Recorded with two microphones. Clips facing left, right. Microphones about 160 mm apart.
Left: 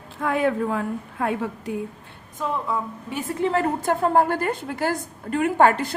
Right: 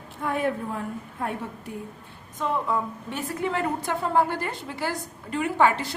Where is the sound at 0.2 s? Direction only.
90° left.